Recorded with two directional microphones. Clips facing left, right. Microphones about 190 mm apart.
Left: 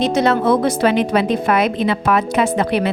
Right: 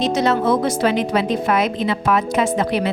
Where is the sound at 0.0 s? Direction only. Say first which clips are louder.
Left 2 dB; 60° left (ahead or behind).